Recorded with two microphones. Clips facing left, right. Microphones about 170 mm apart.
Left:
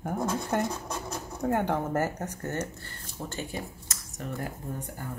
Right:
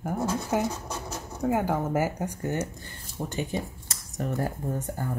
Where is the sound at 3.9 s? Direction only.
40° right (ahead or behind).